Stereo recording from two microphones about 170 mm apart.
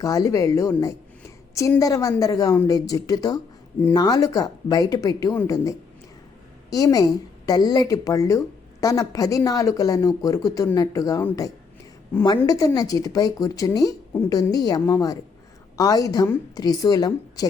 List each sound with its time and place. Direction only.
0.0 s a woman's voice: 20° left (ahead or behind)